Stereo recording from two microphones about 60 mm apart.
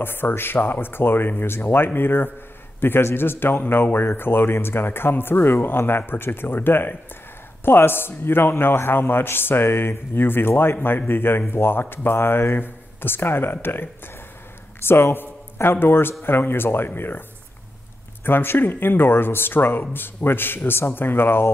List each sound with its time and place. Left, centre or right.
0.0 s a man's voice: left
18.2 s a man's voice: left